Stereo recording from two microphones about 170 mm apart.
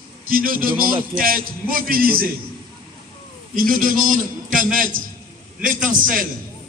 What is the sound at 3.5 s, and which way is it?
A man's voice, 55° right (ahead or behind).